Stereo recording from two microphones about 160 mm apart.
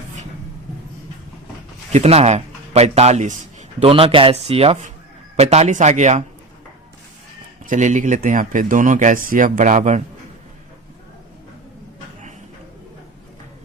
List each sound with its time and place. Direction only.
1.9 s a man's voice: 40° right (ahead or behind)
7.6 s speech: 50° right (ahead or behind)